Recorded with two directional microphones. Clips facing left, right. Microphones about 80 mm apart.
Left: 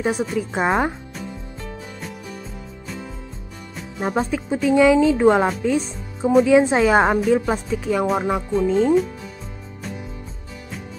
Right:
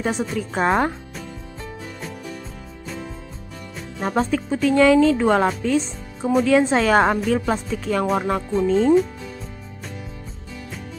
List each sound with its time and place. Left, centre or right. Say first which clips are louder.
0.0 s speech: left 2 dB; centre
4.0 s speech: right 1 dB; centre